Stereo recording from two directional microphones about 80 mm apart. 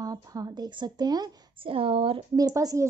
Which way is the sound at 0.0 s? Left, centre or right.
Right.